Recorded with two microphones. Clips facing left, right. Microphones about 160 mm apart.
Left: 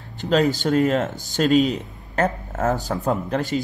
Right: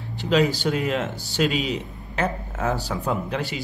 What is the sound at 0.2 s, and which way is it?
Speech, 45° left (ahead or behind).